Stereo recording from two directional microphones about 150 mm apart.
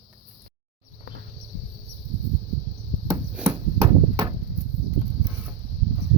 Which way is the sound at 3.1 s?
15° right (ahead or behind).